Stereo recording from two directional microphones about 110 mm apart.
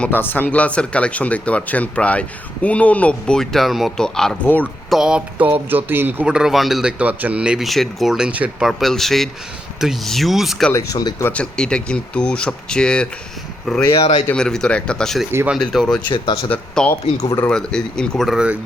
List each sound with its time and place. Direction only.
0.0 s speech: 20° left (ahead or behind)
4.9 s speech: 5° right (ahead or behind)
7.0 s speech: 15° right (ahead or behind)
8.6 s speech: centre (ahead or behind)
11.2 s speech: 15° left (ahead or behind)
13.9 s speech: 70° left (ahead or behind)
14.3 s speech: 5° left (ahead or behind)
16.0 s speech: 50° left (ahead or behind)
16.5 s speech: 10° left (ahead or behind)
17.2 s speech: 25° left (ahead or behind)
17.5 s speech: 5° left (ahead or behind)